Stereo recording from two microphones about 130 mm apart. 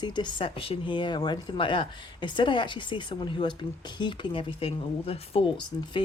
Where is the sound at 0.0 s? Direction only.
35° left (ahead or behind).